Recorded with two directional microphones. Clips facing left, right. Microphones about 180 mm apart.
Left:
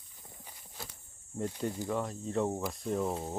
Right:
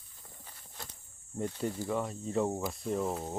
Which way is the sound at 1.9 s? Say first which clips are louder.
Right 1 dB; centre (ahead or behind).